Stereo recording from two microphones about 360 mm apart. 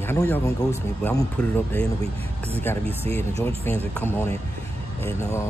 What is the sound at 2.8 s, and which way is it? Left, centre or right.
Speech, centre.